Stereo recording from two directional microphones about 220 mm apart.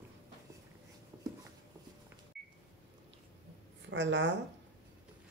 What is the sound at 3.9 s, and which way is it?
Speech, 55° right (ahead or behind).